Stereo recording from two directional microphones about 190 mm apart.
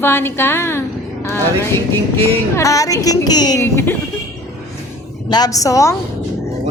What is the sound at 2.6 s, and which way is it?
A woman's voice, 15° left (ahead or behind).